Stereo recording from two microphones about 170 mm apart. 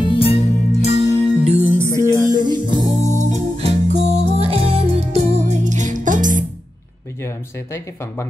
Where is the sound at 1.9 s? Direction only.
15° left (ahead or behind).